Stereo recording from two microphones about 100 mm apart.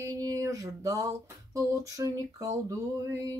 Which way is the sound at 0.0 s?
35° right (ahead or behind).